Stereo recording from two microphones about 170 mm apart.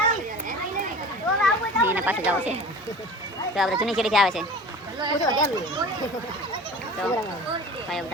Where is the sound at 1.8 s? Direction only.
10° right (ahead or behind).